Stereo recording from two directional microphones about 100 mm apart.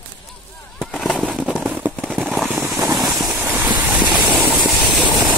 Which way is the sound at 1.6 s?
15° right (ahead or behind).